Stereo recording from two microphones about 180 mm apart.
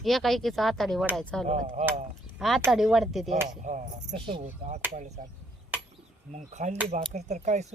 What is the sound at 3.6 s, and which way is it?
Speech, 45° right (ahead or behind).